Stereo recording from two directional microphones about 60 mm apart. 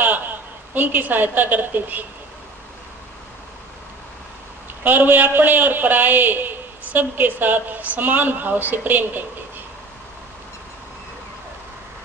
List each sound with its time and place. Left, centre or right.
0.0 s a woman's voice: right
4.8 s a man's voice: right